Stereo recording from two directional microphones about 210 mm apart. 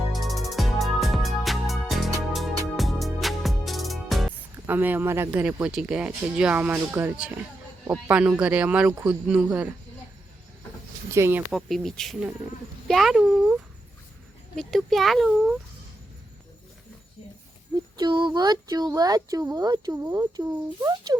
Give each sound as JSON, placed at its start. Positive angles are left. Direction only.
{"t": 0.1, "sound": "music", "side_deg": 0}
{"t": 4.6, "sound": "speech", "side_deg": -10}
{"t": 11.1, "sound": "speech", "side_deg": -10}
{"t": 11.5, "sound": "speech", "side_deg": 0}
{"t": 17.9, "sound": "speech", "side_deg": -20}